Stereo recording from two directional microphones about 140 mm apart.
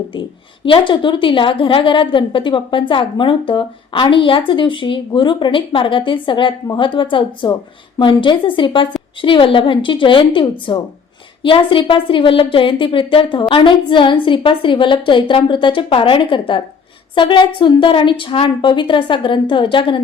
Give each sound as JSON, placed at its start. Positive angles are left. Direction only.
{"t": 0.6, "sound": "a woman's voice", "side_deg": 35}